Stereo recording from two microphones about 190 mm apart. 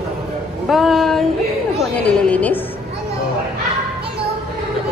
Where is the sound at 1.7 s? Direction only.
5° left (ahead or behind).